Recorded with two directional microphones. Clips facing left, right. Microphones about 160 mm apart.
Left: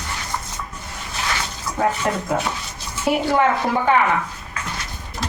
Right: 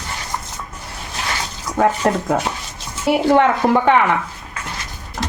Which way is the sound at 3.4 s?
70° right (ahead or behind).